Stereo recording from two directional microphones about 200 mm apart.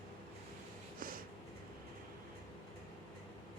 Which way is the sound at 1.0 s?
45° right (ahead or behind).